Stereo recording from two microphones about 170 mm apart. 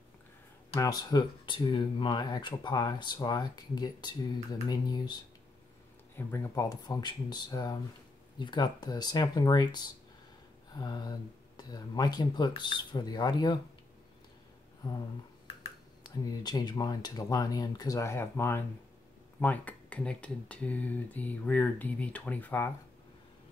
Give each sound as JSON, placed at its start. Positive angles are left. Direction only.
{"t": 0.7, "sound": "speech", "side_deg": 20}
{"t": 16.0, "sound": "speech", "side_deg": 25}